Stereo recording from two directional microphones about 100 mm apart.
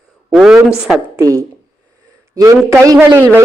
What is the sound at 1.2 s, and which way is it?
A man's voice, 35° right (ahead or behind).